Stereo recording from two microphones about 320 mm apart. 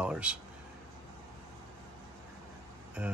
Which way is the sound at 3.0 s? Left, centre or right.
Centre.